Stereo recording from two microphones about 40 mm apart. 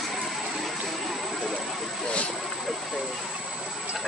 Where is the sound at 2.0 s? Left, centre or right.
Left.